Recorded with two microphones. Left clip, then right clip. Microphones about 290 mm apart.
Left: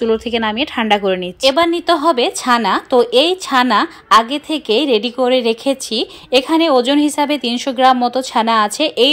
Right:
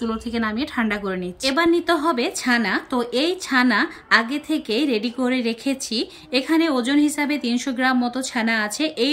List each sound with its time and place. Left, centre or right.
0.0 s a woman's voice: centre